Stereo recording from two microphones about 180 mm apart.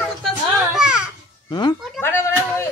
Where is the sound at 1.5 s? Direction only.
25° left (ahead or behind).